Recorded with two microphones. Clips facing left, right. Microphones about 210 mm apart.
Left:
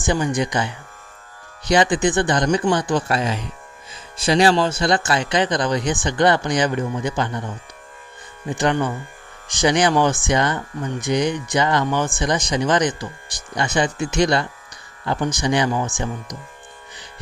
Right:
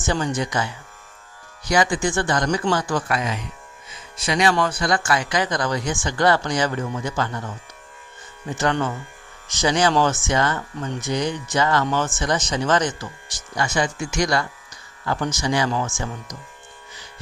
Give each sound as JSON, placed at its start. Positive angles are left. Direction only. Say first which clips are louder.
{"t": 0.0, "sound": "speech", "louder": "left 3 dB", "side_deg": 15}
{"t": 3.1, "sound": "speech", "louder": "left 3 dB", "side_deg": 30}